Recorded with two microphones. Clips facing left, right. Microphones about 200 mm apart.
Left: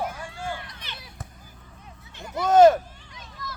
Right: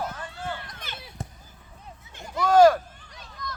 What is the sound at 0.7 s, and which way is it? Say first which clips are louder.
Run: right 2 dB; 45° right (ahead or behind).